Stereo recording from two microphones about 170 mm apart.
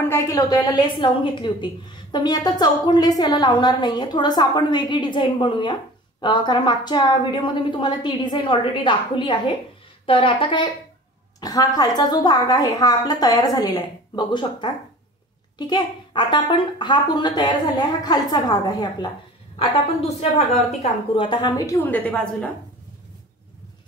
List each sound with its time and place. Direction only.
0.0 s a woman's voice: 15° left (ahead or behind)
20.0 s a woman's voice: 35° left (ahead or behind); by 22.5 s 10° left (ahead or behind)